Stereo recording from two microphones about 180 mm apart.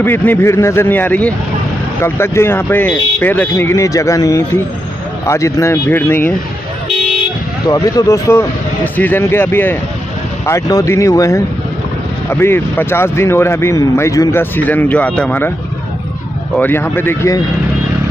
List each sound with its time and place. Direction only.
0.0 s speech: 10° left (ahead or behind)
7.6 s speech: 20° left (ahead or behind)
16.5 s speech: 10° left (ahead or behind)